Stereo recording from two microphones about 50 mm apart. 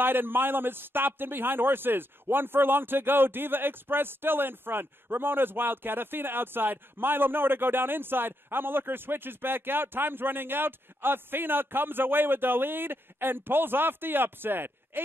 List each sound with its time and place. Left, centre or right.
0.0 s a man's voice: right